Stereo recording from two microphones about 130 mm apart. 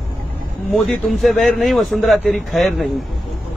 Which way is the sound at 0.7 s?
Centre (ahead or behind).